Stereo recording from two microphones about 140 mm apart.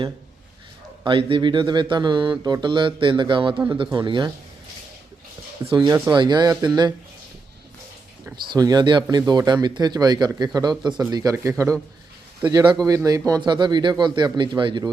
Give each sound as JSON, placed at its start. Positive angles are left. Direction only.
{"t": 1.0, "sound": "speech", "side_deg": -35}
{"t": 5.6, "sound": "speech", "side_deg": -35}
{"t": 8.5, "sound": "speech", "side_deg": -30}